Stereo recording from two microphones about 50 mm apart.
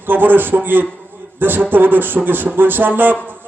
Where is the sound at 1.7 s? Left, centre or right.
Right.